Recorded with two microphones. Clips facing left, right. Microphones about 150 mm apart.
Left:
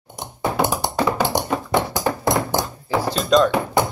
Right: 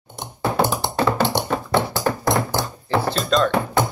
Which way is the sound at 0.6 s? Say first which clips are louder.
Even; 15° left (ahead or behind).